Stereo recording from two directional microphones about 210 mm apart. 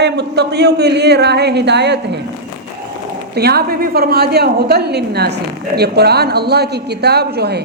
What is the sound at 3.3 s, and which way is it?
A woman's voice, 50° right (ahead or behind).